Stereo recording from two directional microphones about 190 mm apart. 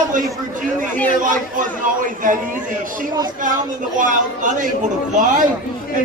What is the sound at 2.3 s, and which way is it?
Speech, 45° right (ahead or behind).